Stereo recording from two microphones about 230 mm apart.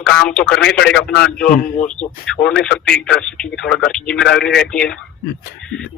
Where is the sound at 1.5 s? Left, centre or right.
Left.